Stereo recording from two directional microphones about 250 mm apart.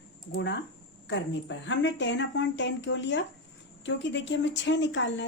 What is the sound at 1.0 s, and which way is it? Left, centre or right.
A woman's voice, left.